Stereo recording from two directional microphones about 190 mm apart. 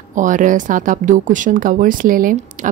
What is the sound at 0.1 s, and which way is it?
Speech, 45° right (ahead or behind).